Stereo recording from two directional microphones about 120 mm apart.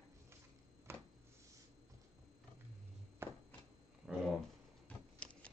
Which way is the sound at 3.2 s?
20° right (ahead or behind).